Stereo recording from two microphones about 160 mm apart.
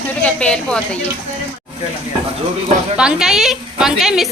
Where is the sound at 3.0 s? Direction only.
5° right (ahead or behind).